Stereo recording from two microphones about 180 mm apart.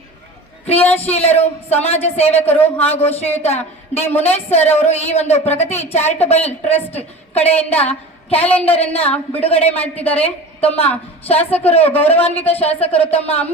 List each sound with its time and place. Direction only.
0.8 s a woman's voice: 10° left (ahead or behind)
1.1 s a woman's voice: 35° left (ahead or behind)